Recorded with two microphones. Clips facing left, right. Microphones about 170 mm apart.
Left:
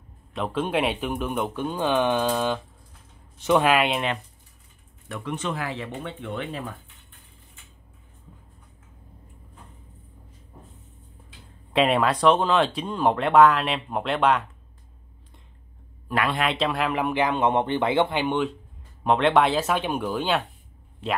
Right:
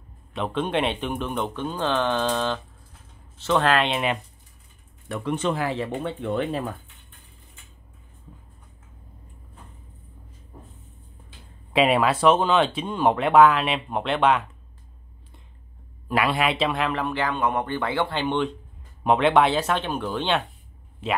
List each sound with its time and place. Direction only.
0.3 s speech: centre (ahead or behind)
5.0 s speech: 30° right (ahead or behind)
11.7 s speech: 5° right (ahead or behind)
16.2 s speech: 5° right (ahead or behind)
16.9 s speech: 15° left (ahead or behind); by 19.8 s centre (ahead or behind)
19.8 s speech: 10° left (ahead or behind); by 21.2 s 5° right (ahead or behind)